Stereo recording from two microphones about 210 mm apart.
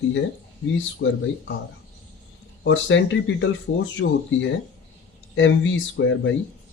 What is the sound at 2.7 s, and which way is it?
Speech, 60° left (ahead or behind).